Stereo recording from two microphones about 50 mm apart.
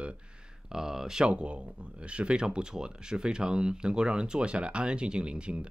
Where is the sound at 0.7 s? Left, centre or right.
Centre.